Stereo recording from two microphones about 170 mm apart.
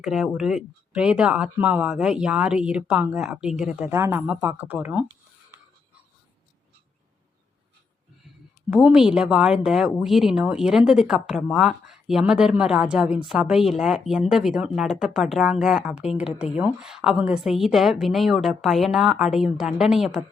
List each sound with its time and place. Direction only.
0.0 s speech: centre (ahead or behind)
5.5 s a sound: 15° right (ahead or behind)
8.7 s speech: 5° right (ahead or behind)